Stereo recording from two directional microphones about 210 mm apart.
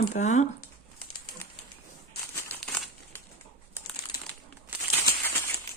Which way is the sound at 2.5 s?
Centre (ahead or behind).